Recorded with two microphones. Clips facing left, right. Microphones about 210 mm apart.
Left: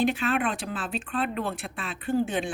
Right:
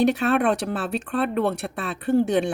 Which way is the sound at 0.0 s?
70° right (ahead or behind).